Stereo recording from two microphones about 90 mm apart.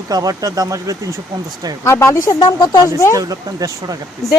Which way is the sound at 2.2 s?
50° left (ahead or behind).